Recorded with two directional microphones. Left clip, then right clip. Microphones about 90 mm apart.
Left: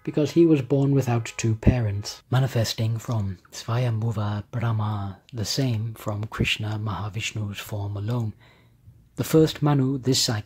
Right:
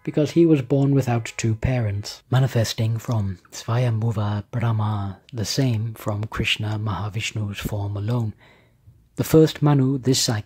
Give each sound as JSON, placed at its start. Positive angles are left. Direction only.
{"t": 0.0, "sound": "speech", "side_deg": -30}